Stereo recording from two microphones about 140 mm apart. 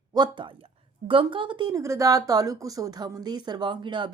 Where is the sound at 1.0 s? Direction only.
40° right (ahead or behind).